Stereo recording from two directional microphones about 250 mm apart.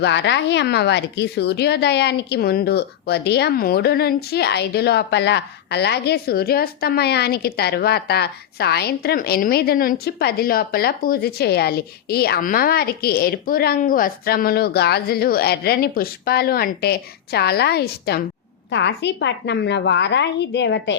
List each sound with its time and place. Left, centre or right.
0.0 s a woman's voice: left